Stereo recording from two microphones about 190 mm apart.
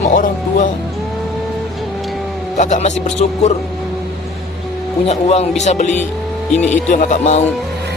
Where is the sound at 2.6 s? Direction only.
40° left (ahead or behind).